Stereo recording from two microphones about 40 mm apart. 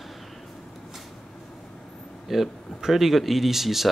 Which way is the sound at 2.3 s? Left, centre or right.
Centre.